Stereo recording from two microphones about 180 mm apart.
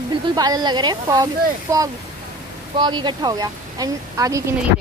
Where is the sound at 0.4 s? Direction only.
20° right (ahead or behind).